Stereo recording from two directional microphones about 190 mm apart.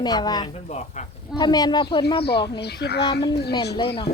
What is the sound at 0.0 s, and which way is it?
Speech, 20° left (ahead or behind).